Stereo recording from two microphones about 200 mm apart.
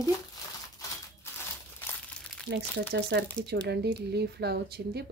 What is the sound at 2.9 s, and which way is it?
Speech, 55° right (ahead or behind).